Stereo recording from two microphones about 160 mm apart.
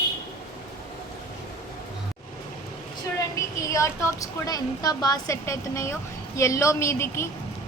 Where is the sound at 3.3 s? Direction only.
20° left (ahead or behind).